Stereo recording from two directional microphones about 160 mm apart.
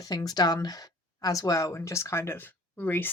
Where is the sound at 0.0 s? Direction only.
25° left (ahead or behind).